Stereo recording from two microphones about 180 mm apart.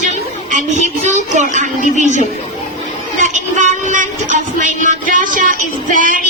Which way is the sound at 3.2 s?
45° right (ahead or behind).